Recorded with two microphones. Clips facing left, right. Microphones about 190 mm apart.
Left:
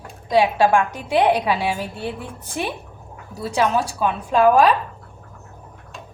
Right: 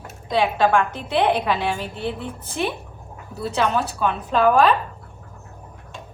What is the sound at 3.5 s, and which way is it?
A woman's voice, 10° left (ahead or behind).